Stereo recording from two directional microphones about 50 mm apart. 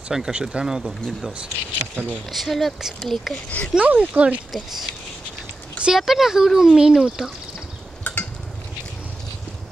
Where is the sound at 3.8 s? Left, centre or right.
Right.